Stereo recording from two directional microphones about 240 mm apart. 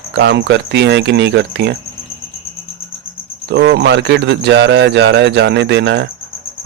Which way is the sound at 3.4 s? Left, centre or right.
Right.